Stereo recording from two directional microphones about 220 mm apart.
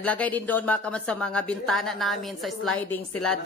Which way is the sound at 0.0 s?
5° left (ahead or behind).